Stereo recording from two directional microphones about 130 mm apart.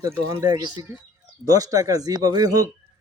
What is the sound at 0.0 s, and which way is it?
Speech, 25° right (ahead or behind).